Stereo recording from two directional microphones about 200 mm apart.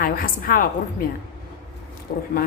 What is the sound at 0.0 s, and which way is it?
Speech, 45° left (ahead or behind).